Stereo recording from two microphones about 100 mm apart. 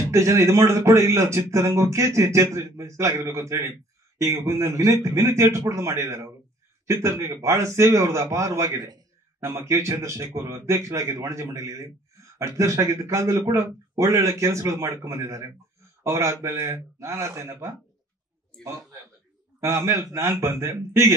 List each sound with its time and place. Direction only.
0.1 s a man's voice: 30° right (ahead or behind)
19.6 s a man's voice: 30° right (ahead or behind)